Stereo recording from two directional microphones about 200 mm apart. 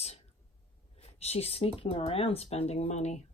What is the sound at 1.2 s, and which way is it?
Speech, 30° left (ahead or behind).